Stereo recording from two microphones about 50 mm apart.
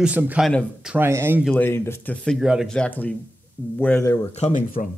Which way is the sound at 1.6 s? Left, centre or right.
Left.